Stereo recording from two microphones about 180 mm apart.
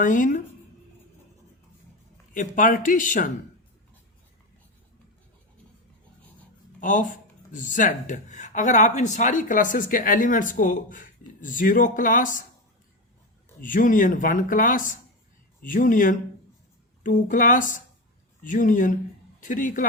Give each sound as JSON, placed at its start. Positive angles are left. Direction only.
{"t": 0.0, "sound": "speech", "side_deg": 45}
{"t": 2.3, "sound": "speech", "side_deg": 45}
{"t": 6.8, "sound": "speech", "side_deg": 45}
{"t": 13.6, "sound": "speech", "side_deg": 50}